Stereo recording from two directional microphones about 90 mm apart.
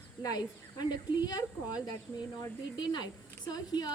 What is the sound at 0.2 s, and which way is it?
Speech, 45° left (ahead or behind).